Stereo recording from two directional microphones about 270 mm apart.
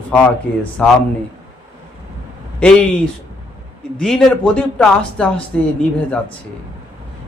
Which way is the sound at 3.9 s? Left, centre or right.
Centre.